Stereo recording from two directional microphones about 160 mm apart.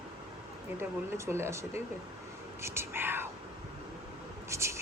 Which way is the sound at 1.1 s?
15° right (ahead or behind).